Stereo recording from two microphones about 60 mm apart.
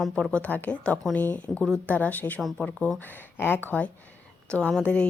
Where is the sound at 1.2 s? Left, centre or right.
Left.